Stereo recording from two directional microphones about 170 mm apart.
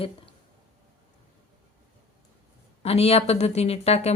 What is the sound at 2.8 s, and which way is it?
Speech, 35° left (ahead or behind).